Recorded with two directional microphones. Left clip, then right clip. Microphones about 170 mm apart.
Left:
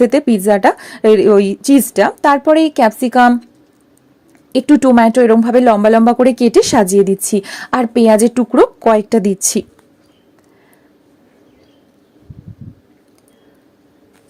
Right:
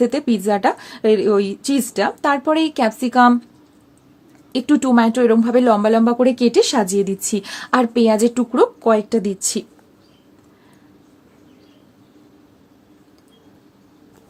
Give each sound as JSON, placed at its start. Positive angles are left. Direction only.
{"t": 0.0, "sound": "a woman's voice", "side_deg": 35}
{"t": 4.5, "sound": "speech", "side_deg": 25}